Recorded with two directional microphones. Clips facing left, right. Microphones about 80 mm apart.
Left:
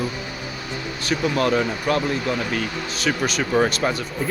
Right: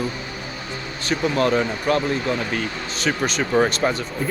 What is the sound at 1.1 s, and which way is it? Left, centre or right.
Speech, centre.